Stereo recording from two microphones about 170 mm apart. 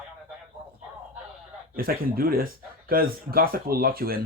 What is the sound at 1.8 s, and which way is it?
Speech, 60° right (ahead or behind).